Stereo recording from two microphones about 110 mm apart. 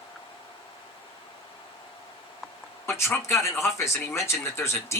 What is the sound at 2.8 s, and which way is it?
Speech, 25° left (ahead or behind).